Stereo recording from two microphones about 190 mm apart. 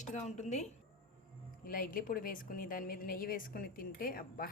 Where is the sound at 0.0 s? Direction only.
40° left (ahead or behind).